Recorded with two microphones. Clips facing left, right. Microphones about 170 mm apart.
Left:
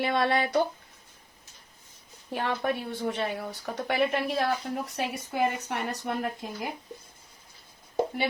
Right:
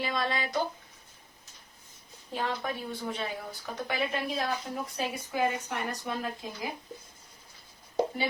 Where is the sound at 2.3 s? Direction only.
65° left (ahead or behind).